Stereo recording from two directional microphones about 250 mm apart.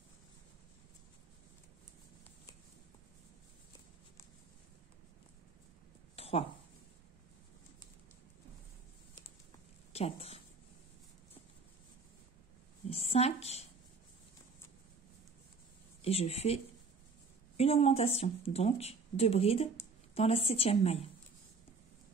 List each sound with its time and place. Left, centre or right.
6.1 s a sound: left
9.9 s a woman's voice: left
12.9 s a woman's voice: left
16.0 s speech: left